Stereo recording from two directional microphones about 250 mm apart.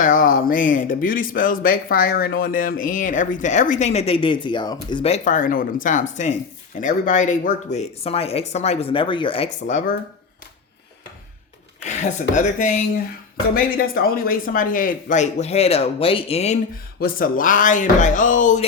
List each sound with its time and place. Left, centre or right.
0.0 s speech: left
11.8 s a sound: left
12.3 s speech: left